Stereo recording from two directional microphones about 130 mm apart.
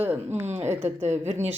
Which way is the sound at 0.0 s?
15° right (ahead or behind).